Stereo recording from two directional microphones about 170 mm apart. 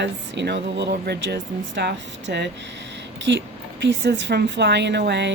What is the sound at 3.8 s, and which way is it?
A woman's voice, 90° right.